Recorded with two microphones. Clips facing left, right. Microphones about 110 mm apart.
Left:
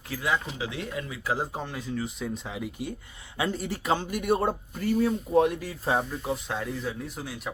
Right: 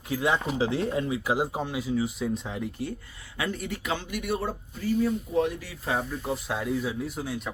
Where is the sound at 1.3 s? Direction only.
10° right (ahead or behind).